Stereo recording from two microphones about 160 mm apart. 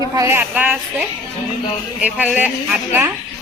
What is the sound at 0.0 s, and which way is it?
A woman's voice, 20° right (ahead or behind).